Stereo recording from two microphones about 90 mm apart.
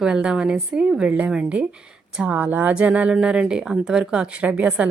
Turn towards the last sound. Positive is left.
turn(degrees=-15)  # may be behind; listen again after turning